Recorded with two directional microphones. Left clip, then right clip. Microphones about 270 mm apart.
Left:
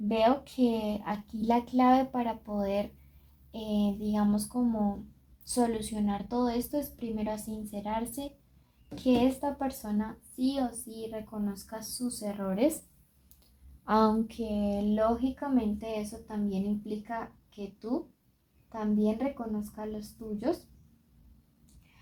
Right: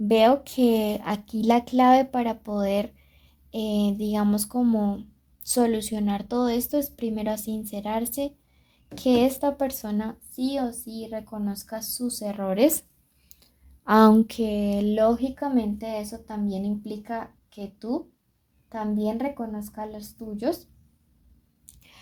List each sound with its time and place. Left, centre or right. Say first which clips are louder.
0.1 s speech: right 8 dB; right
13.4 s a woman's voice: right 7 dB; right